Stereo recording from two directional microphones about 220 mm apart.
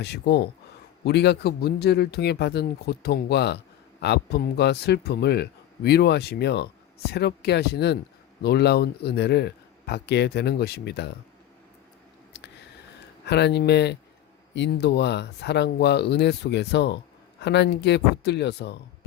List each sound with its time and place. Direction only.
0.0 s speech: 50° left (ahead or behind)
13.2 s speech: 50° left (ahead or behind)